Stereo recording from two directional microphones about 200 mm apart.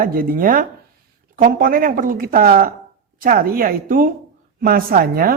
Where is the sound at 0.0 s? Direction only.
45° right (ahead or behind).